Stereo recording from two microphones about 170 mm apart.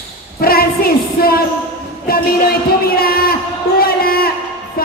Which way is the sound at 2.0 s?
65° left (ahead or behind).